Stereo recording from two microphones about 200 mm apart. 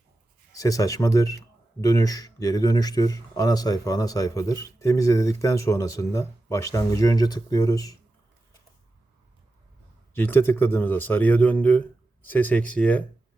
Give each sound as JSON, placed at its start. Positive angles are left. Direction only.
{"t": 0.5, "sound": "speech", "side_deg": 15}
{"t": 10.2, "sound": "speech", "side_deg": 10}